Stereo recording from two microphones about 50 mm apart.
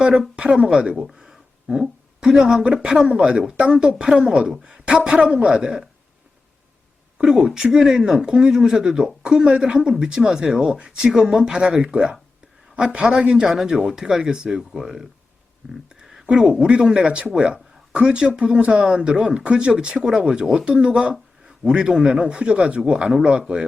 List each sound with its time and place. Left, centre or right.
0.0 s speech: centre
1.0 s a sound: centre
2.2 s speech: centre
7.2 s speech: centre
15.9 s a sound: centre
16.3 s speech: centre